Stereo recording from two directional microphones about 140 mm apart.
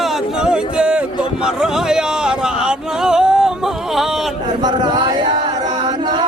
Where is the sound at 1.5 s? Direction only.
5° right (ahead or behind).